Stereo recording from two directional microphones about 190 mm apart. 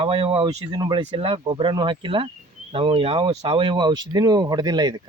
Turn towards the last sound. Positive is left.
turn(degrees=-20)  # may be behind; listen again after turning